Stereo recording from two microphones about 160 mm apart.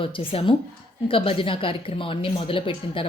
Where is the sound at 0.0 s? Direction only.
35° left (ahead or behind).